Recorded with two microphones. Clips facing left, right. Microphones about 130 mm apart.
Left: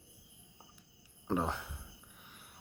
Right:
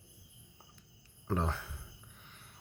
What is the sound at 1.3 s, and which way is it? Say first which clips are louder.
Speech: left 1 dB; 15° left (ahead or behind).